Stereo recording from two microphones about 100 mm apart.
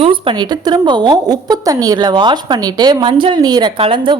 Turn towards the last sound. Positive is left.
turn(degrees=-55)  # may be behind; listen again after turning